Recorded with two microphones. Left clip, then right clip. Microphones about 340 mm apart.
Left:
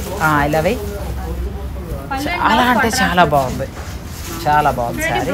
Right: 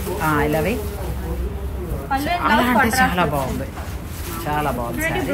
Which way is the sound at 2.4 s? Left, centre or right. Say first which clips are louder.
Left 4 dB; left.